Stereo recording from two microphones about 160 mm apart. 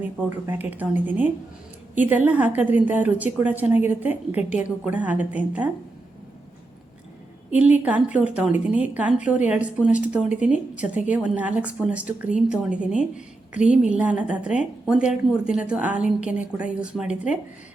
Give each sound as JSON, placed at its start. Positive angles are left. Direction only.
{"t": 0.0, "sound": "a woman's voice", "side_deg": -10}
{"t": 7.5, "sound": "a woman's voice", "side_deg": -10}